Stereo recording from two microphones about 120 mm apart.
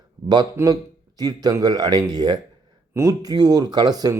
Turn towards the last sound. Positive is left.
turn(degrees=-30)  # may be behind; listen again after turning